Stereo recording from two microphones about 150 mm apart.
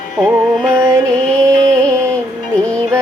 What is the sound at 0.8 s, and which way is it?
Music, 20° right (ahead or behind).